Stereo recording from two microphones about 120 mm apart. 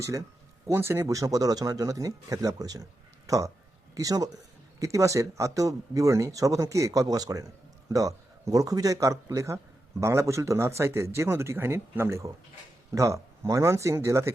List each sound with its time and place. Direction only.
0.0 s speech: 25° right (ahead or behind)